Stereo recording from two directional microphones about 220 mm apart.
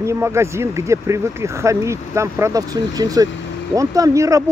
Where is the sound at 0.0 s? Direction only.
10° right (ahead or behind).